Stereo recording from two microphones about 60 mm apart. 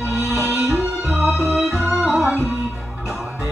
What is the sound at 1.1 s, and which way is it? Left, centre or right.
Organ, centre.